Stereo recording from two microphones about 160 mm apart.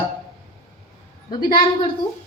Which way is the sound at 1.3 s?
30° left (ahead or behind).